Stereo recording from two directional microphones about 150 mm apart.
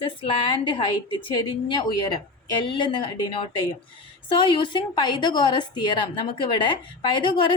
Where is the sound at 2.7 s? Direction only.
35° left (ahead or behind).